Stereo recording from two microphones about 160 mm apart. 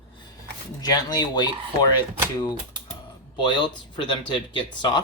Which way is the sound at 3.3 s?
30° left (ahead or behind).